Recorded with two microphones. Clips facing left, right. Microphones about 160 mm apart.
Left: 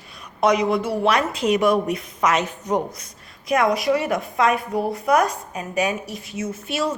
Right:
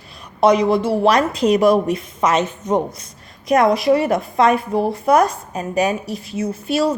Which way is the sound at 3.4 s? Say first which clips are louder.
Right 5 dB; 35° right (ahead or behind).